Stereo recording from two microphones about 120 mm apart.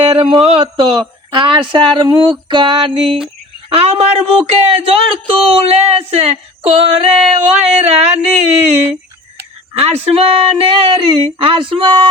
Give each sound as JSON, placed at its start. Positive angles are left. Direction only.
{"t": 0.0, "sound": "speech", "side_deg": -50}
{"t": 2.5, "sound": "a sound", "side_deg": -40}
{"t": 3.7, "sound": "speech", "side_deg": -55}
{"t": 9.7, "sound": "speech", "side_deg": -55}